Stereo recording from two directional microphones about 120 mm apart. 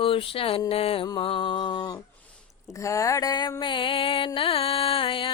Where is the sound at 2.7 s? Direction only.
25° left (ahead or behind).